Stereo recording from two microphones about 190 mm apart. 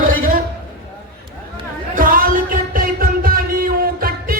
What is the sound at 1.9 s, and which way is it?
Music, 45° right (ahead or behind).